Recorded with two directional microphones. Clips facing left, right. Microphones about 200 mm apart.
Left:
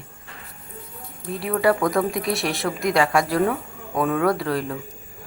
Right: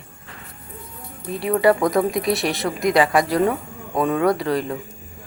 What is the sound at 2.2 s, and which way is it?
Speech, centre (ahead or behind).